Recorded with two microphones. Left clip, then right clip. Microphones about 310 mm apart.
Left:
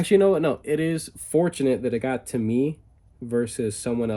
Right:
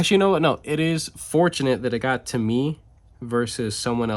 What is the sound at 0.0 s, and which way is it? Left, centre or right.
Speech, centre.